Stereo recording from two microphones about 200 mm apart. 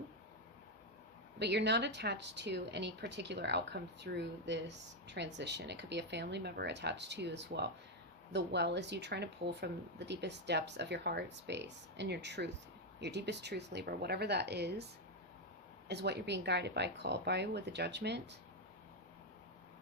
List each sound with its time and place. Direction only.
1.4 s speech: 60° right (ahead or behind)
15.9 s speech: 55° right (ahead or behind)